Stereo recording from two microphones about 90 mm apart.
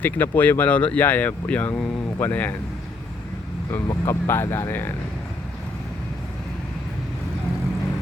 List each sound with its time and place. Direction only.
0.0 s speech: 20° left (ahead or behind)
3.8 s speech: 30° left (ahead or behind)